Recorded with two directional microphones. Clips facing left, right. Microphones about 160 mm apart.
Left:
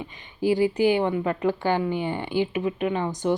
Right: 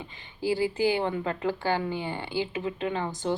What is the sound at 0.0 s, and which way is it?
A woman's voice, 15° left (ahead or behind).